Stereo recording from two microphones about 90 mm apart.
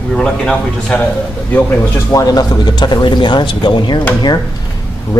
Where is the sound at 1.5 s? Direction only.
25° left (ahead or behind).